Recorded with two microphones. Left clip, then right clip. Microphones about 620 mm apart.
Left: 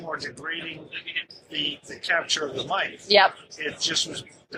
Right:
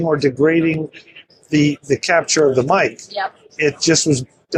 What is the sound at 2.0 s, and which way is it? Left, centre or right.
Speech, right.